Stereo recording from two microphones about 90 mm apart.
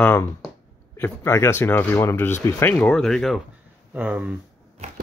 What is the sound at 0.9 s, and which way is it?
Speech, 30° left (ahead or behind).